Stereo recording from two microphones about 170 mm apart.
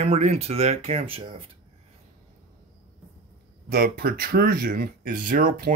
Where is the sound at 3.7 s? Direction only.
60° right (ahead or behind).